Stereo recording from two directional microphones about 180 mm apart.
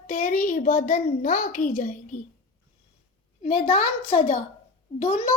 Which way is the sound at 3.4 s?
35° left (ahead or behind).